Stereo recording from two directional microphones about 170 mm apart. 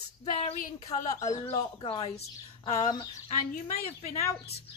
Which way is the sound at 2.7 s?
20° left (ahead or behind).